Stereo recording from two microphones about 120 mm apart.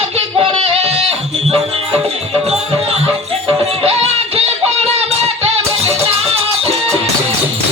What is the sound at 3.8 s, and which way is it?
Music, 55° right (ahead or behind).